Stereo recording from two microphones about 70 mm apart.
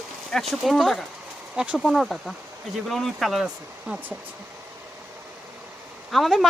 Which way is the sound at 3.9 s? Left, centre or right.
Centre.